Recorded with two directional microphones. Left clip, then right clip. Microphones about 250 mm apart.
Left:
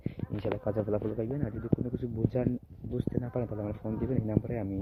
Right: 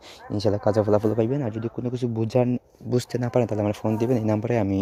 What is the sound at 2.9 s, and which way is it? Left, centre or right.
Speech, right.